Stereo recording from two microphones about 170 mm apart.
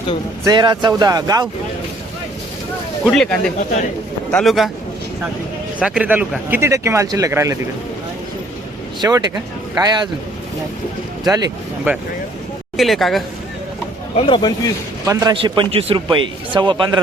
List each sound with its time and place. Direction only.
0.4 s a man's voice: 25° right (ahead or behind)
3.0 s a woman's voice: centre (ahead or behind)
5.8 s speech: 5° right (ahead or behind)
9.0 s a man's voice: 20° right (ahead or behind)
11.2 s a man's voice: 20° right (ahead or behind)
11.9 s speech: 10° right (ahead or behind)
12.7 s a woman's voice: centre (ahead or behind)
14.2 s speech: 30° left (ahead or behind)
15.0 s a man's voice: 20° right (ahead or behind)